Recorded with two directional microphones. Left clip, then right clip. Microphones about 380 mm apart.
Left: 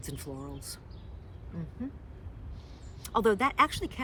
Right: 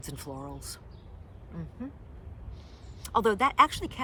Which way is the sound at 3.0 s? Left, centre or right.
Centre.